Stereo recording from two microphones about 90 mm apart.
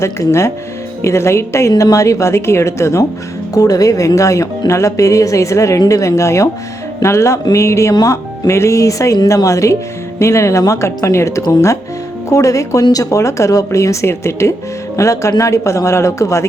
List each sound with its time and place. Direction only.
0.0 s speech: 30° left (ahead or behind)